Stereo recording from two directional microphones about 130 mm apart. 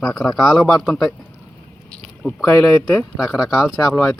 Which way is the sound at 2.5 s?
20° left (ahead or behind).